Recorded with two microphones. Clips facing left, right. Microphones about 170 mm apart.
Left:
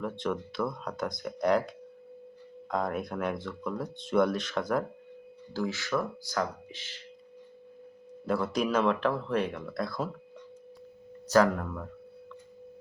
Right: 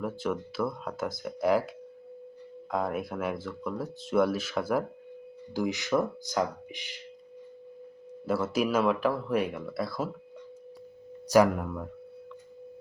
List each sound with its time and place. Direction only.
0.0 s speech: 5° right (ahead or behind)
8.3 s speech: 5° right (ahead or behind)
11.3 s speech: 10° right (ahead or behind)